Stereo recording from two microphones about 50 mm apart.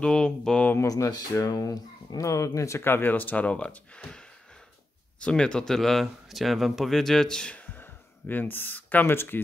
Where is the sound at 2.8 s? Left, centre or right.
Left; by 7.5 s centre.